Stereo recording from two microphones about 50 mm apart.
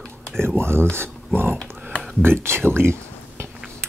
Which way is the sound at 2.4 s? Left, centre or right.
Right.